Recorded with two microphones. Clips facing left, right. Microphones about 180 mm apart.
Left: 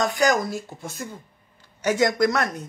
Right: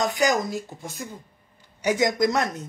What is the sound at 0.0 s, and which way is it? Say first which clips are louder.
A woman's voice: left 1 dB; 20° right (ahead or behind).